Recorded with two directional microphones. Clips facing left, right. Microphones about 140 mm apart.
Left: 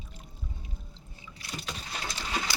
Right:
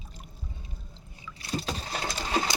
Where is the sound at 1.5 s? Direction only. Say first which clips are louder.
Right 7 dB; 35° right (ahead or behind).